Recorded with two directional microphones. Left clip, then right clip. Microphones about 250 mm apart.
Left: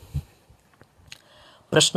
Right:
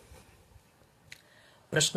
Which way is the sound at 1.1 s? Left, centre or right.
Left.